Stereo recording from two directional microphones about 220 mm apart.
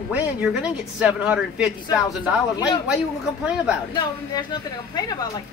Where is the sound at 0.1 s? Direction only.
5° right (ahead or behind).